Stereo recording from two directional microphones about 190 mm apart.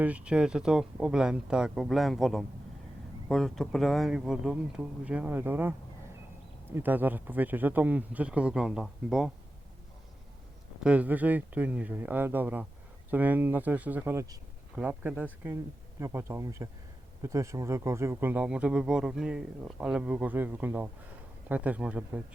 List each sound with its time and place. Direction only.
0.0 s speech: 5° right (ahead or behind)
6.7 s speech: 10° right (ahead or behind)
10.8 s speech: 5° right (ahead or behind)